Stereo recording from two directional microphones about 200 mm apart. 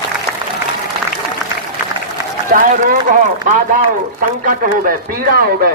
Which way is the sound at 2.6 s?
40° right (ahead or behind).